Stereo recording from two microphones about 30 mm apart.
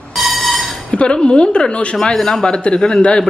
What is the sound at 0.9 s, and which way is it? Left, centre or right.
Speech, left.